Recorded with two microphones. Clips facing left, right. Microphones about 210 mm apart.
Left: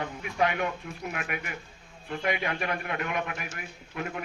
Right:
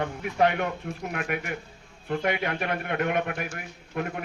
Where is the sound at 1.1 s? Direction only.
45° right (ahead or behind).